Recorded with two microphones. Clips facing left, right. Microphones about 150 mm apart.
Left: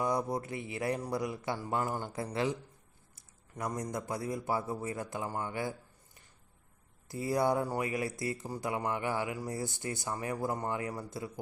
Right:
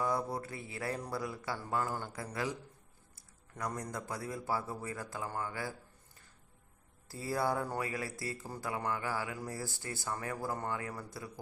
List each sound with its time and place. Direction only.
0.0 s speech: 20° left (ahead or behind)
7.1 s speech: 20° left (ahead or behind)